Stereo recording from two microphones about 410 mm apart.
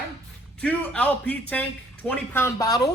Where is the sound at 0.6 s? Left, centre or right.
Centre.